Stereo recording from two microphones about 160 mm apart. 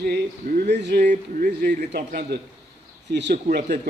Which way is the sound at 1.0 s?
55° right (ahead or behind).